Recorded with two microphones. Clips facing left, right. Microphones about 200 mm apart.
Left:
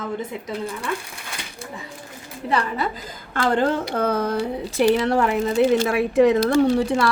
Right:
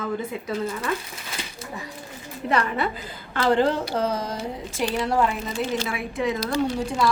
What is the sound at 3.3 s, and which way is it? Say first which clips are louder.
A woman's voice: even; 50° left (ahead or behind).